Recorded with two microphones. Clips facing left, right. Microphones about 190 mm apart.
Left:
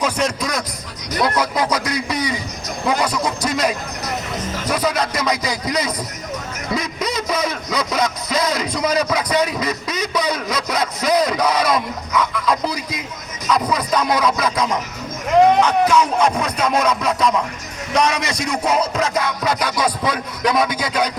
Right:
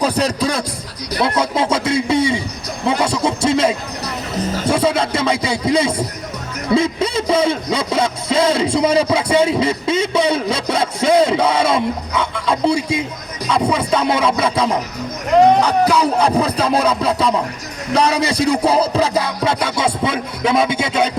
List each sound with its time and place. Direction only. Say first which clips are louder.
0.0 s music: right 4 dB; 35° right (ahead or behind)
1.1 s a sound: right 2 dB; 25° right (ahead or behind)
4.6 s music: right 4 dB; 30° right (ahead or behind)
6.7 s a man's voice: right 7 dB; 30° right (ahead or behind)
13.5 s music: right 2 dB; 30° right (ahead or behind)